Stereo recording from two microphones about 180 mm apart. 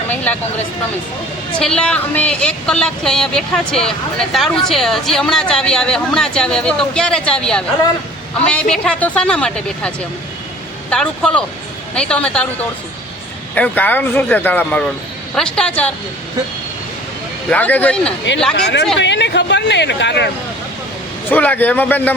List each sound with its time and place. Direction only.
1.5 s speech: 5° left (ahead or behind)
8.7 s speech: 5° left (ahead or behind)
13.6 s speech: 10° left (ahead or behind)
17.5 s speech: 10° left (ahead or behind)
18.5 s speech: 70° left (ahead or behind)
21.2 s speech: 10° left (ahead or behind)